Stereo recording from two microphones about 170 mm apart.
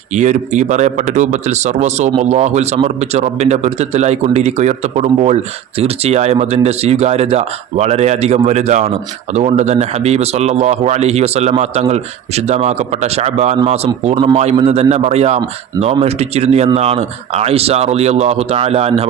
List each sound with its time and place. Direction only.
0.1 s speech: 45° right (ahead or behind)